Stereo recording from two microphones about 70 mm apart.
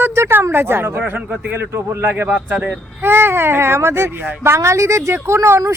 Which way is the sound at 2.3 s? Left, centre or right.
Centre.